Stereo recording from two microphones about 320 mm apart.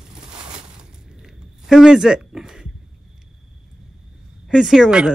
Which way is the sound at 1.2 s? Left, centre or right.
Centre.